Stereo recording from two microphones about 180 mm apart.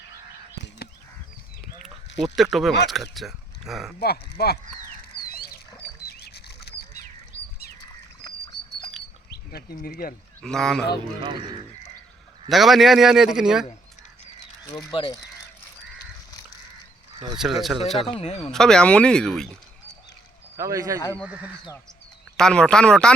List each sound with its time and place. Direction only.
2.2 s a man's voice: centre (ahead or behind)
4.0 s speech: 60° left (ahead or behind)
5.3 s a sound: 55° left (ahead or behind)
9.5 s speech: 60° left (ahead or behind)
10.4 s a man's voice: 5° left (ahead or behind)
12.5 s a man's voice: centre (ahead or behind)
14.8 s speech: 25° left (ahead or behind)
17.3 s a man's voice: centre (ahead or behind)
18.1 s speech: 35° left (ahead or behind)
18.5 s a man's voice: 5° left (ahead or behind)
20.6 s speech: 20° right (ahead or behind)
22.4 s a man's voice: 5° left (ahead or behind)